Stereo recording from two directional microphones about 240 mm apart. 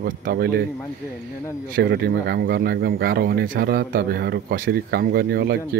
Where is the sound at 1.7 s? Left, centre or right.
Right.